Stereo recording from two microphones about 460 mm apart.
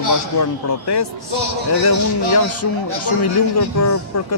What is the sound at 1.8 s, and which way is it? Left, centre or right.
A man's voice, left.